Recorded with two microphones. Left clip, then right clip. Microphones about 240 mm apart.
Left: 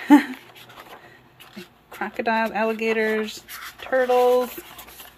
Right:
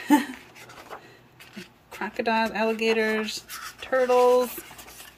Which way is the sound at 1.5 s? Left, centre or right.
Centre.